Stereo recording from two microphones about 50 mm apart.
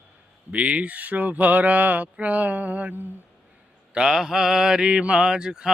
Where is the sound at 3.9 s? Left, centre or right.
Centre.